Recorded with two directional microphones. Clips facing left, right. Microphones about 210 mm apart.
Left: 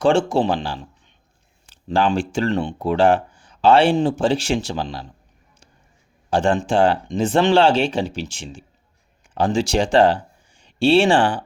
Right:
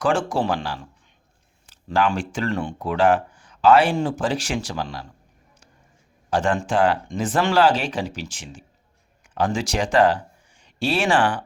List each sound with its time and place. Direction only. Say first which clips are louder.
0.0 s speech: left 5 dB; 25° left (ahead or behind)
6.3 s speech: left 3 dB; 30° left (ahead or behind)